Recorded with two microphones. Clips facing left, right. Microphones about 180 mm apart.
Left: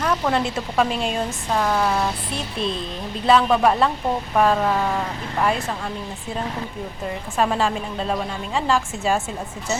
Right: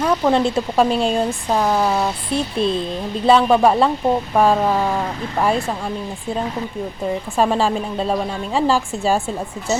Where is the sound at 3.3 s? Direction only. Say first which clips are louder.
Right 3 dB; 30° right (ahead or behind).